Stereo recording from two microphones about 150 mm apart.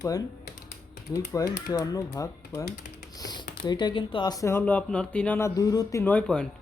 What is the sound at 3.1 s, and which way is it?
Typing, 25° left (ahead or behind).